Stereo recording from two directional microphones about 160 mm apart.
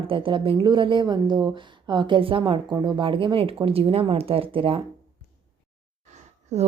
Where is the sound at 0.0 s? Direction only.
35° right (ahead or behind).